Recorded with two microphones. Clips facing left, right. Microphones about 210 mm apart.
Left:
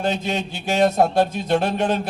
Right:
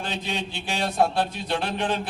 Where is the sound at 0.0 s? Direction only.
45° left (ahead or behind).